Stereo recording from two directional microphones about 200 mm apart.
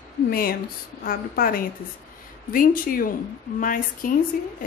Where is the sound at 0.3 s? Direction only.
45° left (ahead or behind).